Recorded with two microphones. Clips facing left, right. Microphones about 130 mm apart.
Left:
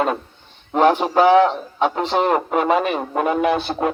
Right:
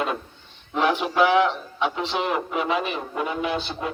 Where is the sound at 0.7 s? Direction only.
45° left (ahead or behind).